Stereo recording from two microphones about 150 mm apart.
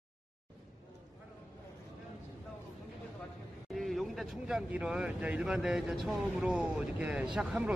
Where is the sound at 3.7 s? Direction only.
Centre (ahead or behind).